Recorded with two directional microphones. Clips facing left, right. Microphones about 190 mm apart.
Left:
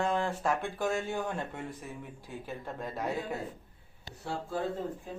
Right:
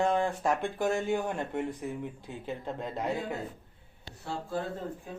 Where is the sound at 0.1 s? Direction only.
15° right (ahead or behind).